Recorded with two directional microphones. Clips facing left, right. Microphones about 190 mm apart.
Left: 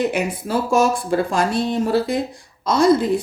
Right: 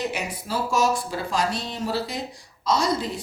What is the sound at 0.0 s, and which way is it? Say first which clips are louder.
Speech: left 8 dB; 55° left (ahead or behind).